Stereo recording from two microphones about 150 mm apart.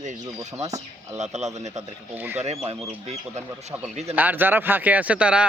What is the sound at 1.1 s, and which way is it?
Speech, 50° right (ahead or behind).